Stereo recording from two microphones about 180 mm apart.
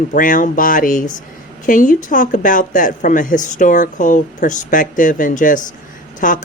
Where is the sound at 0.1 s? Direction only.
50° left (ahead or behind).